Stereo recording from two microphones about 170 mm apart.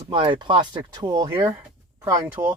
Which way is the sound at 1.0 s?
15° right (ahead or behind).